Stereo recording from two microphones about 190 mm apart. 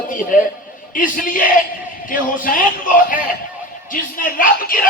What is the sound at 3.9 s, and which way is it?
Speech, 45° left (ahead or behind).